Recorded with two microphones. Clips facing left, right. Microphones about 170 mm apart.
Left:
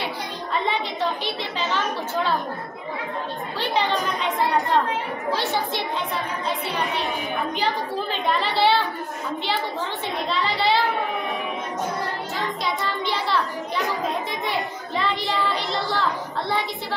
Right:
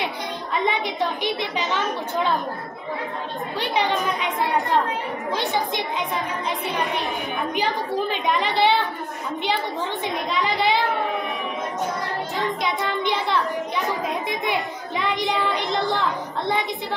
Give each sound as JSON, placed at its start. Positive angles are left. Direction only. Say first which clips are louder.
{"t": 1.4, "sound": "a woman's voice", "louder": "right 1 dB", "side_deg": -15}
{"t": 3.5, "sound": "a woman's voice", "louder": "even", "side_deg": -10}
{"t": 5.3, "sound": "a woman's voice", "louder": "even", "side_deg": -15}
{"t": 8.1, "sound": "a woman's voice", "louder": "right 1 dB", "side_deg": -15}
{"t": 10.3, "sound": "a woman's voice", "louder": "even", "side_deg": -15}
{"t": 15.0, "sound": "child singing", "louder": "right 1 dB", "side_deg": -15}
{"t": 15.9, "sound": "a woman's voice", "louder": "right 1 dB", "side_deg": -20}